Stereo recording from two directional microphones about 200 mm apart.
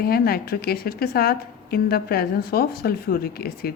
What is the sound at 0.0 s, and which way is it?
Speech, 50° left (ahead or behind).